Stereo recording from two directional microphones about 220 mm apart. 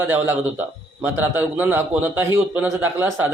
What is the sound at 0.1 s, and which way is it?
Speech, 10° right (ahead or behind).